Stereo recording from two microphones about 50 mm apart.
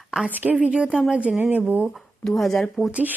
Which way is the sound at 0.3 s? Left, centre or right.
Right.